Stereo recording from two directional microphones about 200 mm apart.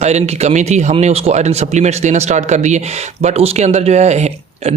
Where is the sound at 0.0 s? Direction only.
35° right (ahead or behind).